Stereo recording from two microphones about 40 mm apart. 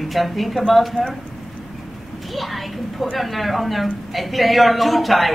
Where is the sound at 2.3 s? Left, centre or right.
Centre.